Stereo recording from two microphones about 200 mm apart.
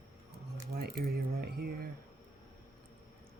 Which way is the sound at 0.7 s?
50° right (ahead or behind).